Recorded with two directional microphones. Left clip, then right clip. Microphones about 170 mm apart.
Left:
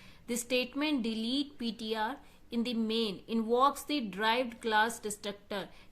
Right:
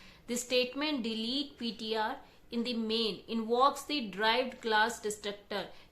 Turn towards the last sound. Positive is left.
turn(degrees=40)  # may be behind; listen again after turning